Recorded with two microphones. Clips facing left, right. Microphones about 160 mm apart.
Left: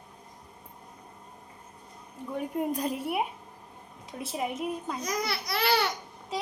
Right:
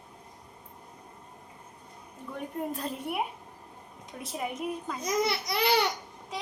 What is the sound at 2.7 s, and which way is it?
Speech, 15° left (ahead or behind).